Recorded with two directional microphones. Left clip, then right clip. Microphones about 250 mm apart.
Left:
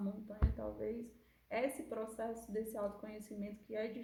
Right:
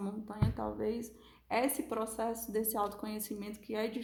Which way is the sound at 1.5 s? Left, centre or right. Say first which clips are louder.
Right 6 dB; right.